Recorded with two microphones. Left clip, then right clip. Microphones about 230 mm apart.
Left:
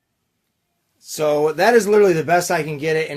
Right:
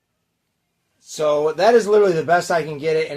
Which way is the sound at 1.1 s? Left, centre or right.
Left.